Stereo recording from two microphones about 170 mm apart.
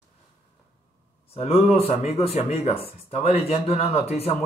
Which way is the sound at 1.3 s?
35° left (ahead or behind).